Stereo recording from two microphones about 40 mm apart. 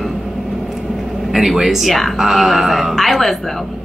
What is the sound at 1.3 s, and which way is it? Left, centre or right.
Speech, centre.